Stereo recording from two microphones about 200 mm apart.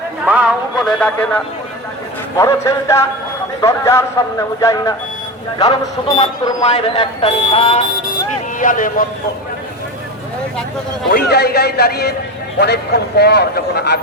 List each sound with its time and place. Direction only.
0.3 s a sound: 10° right (ahead or behind)
0.9 s a man's voice: 5° left (ahead or behind)
2.4 s a man's voice: 15° left (ahead or behind)
8.5 s a man's voice: 40° left (ahead or behind)
11.1 s a man's voice: 50° left (ahead or behind)